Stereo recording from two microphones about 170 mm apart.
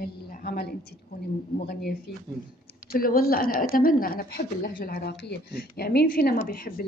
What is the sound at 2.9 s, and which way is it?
A woman's voice, 60° left (ahead or behind).